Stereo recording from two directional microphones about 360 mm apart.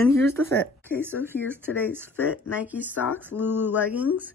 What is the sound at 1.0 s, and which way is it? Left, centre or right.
Speech, centre.